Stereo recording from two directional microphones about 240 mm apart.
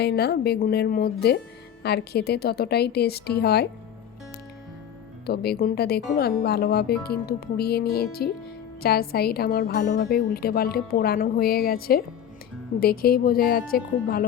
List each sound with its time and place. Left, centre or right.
0.0 s a woman's voice: left
5.2 s a woman's voice: left